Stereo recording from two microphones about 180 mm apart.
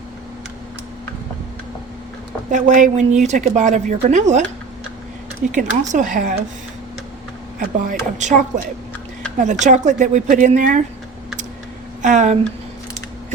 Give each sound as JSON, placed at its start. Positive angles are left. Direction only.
{"t": 2.5, "sound": "speech", "side_deg": -45}
{"t": 5.5, "sound": "speech", "side_deg": -45}
{"t": 7.6, "sound": "speech", "side_deg": -50}
{"t": 9.4, "sound": "speech", "side_deg": -45}
{"t": 12.0, "sound": "speech", "side_deg": -40}